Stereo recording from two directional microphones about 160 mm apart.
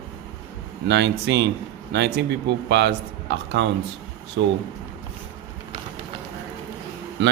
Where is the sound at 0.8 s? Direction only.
90° right.